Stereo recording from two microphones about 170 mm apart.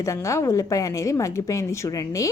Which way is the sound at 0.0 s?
15° left (ahead or behind).